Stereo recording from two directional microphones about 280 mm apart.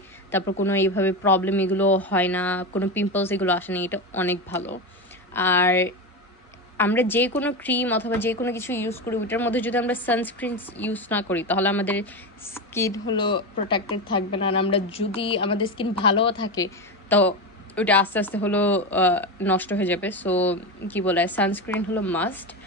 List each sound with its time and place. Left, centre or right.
0.7 s a woman's voice: centre